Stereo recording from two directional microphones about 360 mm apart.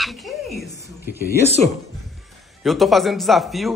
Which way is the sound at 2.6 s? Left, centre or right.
Centre.